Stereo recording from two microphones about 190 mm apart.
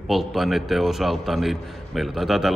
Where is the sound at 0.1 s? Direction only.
Centre (ahead or behind).